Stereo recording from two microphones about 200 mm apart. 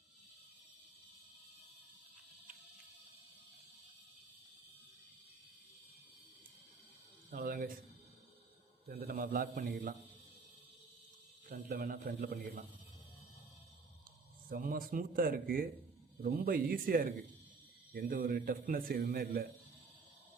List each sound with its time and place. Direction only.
7.3 s a sound: 45° right (ahead or behind)
8.9 s a man's voice: 45° right (ahead or behind)
11.4 s a man's voice: 45° right (ahead or behind)
14.5 s a man's voice: 45° right (ahead or behind)